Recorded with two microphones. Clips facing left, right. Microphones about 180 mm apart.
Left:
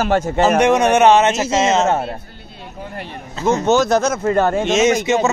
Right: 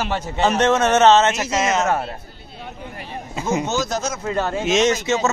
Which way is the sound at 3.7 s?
60° left (ahead or behind).